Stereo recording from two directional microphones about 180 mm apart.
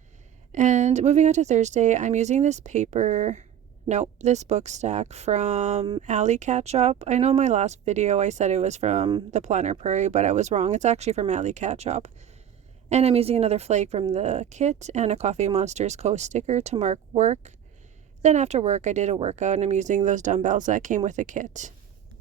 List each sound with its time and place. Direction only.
0.5 s speech: 40° right (ahead or behind)